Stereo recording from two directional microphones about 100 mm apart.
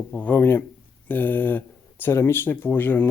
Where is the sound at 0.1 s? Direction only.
15° left (ahead or behind).